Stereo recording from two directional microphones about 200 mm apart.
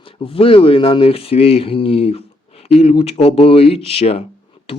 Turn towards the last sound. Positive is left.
turn(degrees=30)  # may be behind; listen again after turning